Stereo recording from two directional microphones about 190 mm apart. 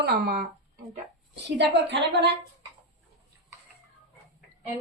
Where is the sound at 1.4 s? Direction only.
65° right (ahead or behind).